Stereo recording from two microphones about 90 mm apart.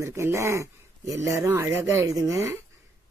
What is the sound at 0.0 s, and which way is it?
A man's voice, 30° right (ahead or behind).